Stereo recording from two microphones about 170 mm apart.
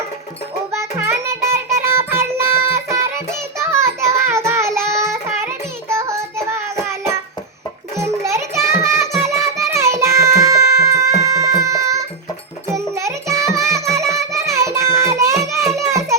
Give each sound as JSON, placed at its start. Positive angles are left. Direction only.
{"t": 0.8, "sound": "child singing", "side_deg": -15}
{"t": 7.9, "sound": "music", "side_deg": -15}
{"t": 13.7, "sound": "child singing", "side_deg": -15}
{"t": 15.7, "sound": "music", "side_deg": -20}